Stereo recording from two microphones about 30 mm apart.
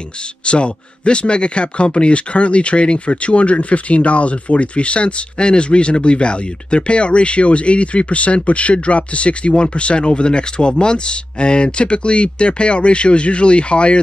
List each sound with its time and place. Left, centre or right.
0.5 s speech: left